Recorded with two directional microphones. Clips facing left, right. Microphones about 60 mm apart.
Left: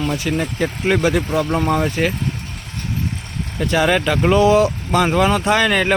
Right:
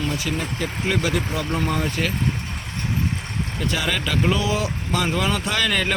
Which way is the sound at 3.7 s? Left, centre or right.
Left.